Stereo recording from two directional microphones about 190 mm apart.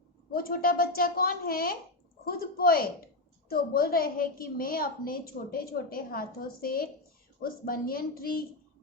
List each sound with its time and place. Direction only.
0.3 s a woman's voice: 50° left (ahead or behind)